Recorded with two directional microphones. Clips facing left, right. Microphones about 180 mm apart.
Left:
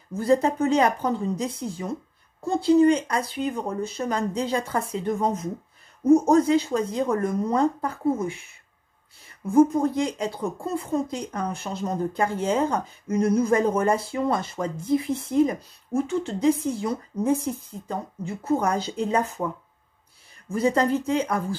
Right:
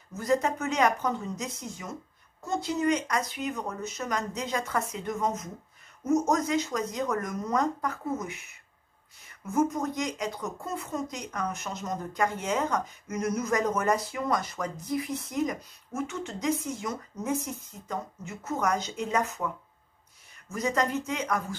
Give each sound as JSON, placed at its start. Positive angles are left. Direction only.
{"t": 0.1, "sound": "speech", "side_deg": 30}